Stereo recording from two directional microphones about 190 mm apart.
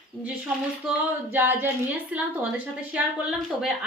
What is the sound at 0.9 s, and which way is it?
Female singing, 10° right (ahead or behind).